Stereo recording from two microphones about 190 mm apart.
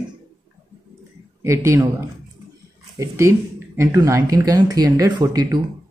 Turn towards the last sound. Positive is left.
turn(degrees=-20)  # may be behind; listen again after turning